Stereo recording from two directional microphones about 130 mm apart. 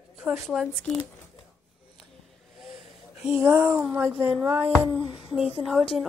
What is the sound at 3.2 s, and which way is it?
A woman's voice, 10° right (ahead or behind).